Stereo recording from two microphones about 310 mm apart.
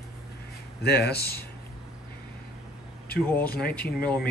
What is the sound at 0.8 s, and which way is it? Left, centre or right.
Speech, left.